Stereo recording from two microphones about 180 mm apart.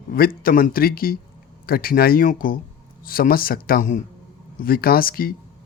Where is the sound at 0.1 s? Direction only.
55° left (ahead or behind).